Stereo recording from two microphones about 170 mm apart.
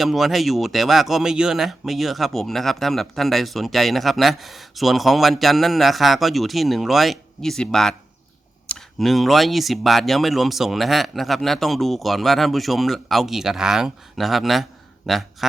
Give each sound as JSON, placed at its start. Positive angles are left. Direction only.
{"t": 0.0, "sound": "speech", "side_deg": 0}